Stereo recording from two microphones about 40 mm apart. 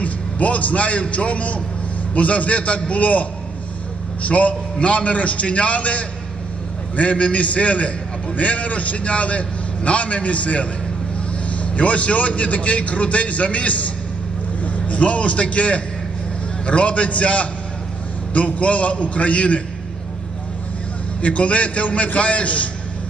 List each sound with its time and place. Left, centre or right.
0.0 s a man's voice: left
21.2 s a man's voice: left